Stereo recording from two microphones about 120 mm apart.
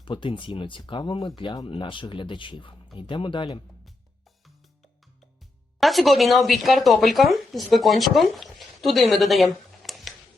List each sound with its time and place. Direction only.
0.0 s speech: 45° left (ahead or behind)
5.8 s speech: centre (ahead or behind)